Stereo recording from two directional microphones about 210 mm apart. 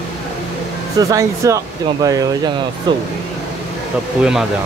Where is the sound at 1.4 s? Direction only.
15° right (ahead or behind).